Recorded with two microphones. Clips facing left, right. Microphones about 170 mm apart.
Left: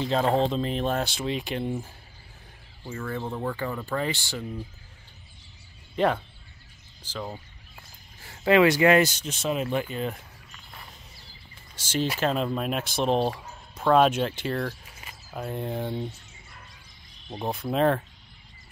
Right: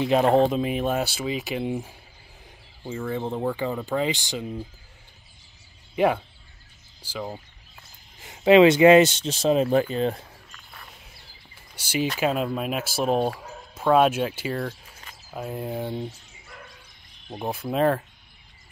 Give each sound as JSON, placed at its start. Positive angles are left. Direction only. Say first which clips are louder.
{"t": 0.0, "sound": "speech", "louder": "right 5 dB", "side_deg": -15}
{"t": 2.8, "sound": "speech", "louder": "right 4 dB", "side_deg": -20}
{"t": 5.9, "sound": "speech", "louder": "right 2 dB", "side_deg": -10}
{"t": 11.7, "sound": "speech", "louder": "right 1 dB", "side_deg": -10}
{"t": 15.0, "sound": "a sound", "louder": "left 1 dB", "side_deg": 10}
{"t": 15.3, "sound": "speech", "louder": "right 1 dB", "side_deg": -5}
{"t": 17.3, "sound": "speech", "louder": "right 1 dB", "side_deg": -5}